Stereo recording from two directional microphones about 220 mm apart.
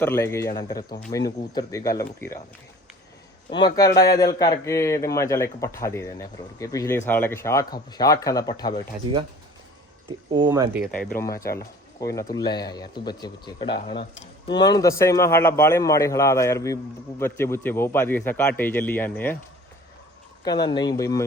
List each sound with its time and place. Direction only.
0.0 s a man's voice: 10° left (ahead or behind)
3.8 s a man's voice: 15° left (ahead or behind)
10.3 s speech: 20° right (ahead or behind)
11.2 s a man's voice: 15° left (ahead or behind)
20.4 s a man's voice: 20° left (ahead or behind)